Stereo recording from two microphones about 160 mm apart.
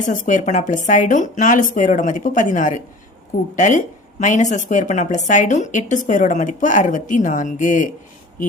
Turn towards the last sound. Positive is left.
turn(degrees=50)  # may be behind; listen again after turning